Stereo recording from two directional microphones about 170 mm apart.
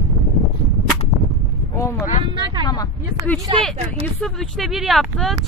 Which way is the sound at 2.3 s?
30° right (ahead or behind).